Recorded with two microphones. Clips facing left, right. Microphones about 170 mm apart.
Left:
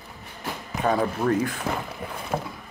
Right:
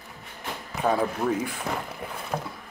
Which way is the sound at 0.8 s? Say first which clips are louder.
Left 1 dB; 5° right (ahead or behind).